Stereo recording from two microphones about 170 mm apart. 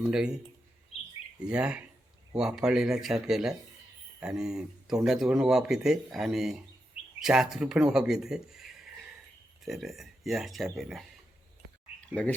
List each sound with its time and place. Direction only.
0.1 s speech: 5° right (ahead or behind)
0.9 s bird: 40° left (ahead or behind)
1.4 s speech: 5° right (ahead or behind)
12.2 s speech: 5° left (ahead or behind)